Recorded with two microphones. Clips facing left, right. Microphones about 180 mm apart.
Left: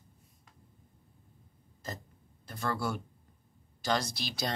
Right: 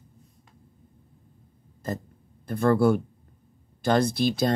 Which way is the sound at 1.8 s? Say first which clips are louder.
Right 11 dB; 55° right (ahead or behind).